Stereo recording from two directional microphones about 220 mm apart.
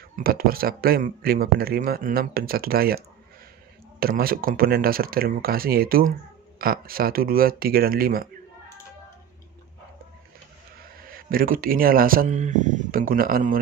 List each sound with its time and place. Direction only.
0.1 s speech: 40° right (ahead or behind)
4.0 s speech: 40° right (ahead or behind)
11.1 s speech: 40° right (ahead or behind)